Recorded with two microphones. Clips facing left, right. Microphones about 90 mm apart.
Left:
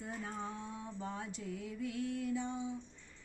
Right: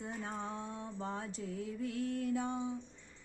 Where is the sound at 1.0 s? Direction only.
35° right (ahead or behind).